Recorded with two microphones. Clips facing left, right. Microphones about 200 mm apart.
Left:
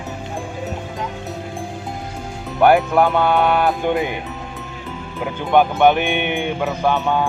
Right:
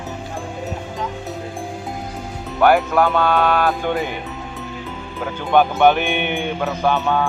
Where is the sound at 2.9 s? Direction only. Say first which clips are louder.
Left 1 dB; 20° left (ahead or behind).